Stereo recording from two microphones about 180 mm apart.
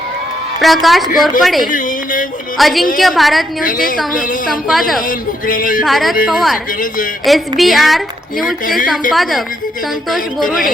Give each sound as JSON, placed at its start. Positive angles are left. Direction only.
{"t": 0.6, "sound": "a woman's voice", "side_deg": 0}
{"t": 3.6, "sound": "music", "side_deg": 50}
{"t": 4.4, "sound": "a woman's voice", "side_deg": 0}
{"t": 5.0, "sound": "music", "side_deg": 50}
{"t": 5.8, "sound": "a woman's voice", "side_deg": 0}
{"t": 10.4, "sound": "music", "side_deg": 50}